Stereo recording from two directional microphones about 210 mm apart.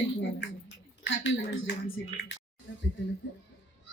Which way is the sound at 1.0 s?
65° left (ahead or behind).